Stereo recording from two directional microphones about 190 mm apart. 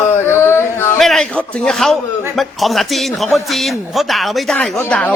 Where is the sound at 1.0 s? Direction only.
Centre (ahead or behind).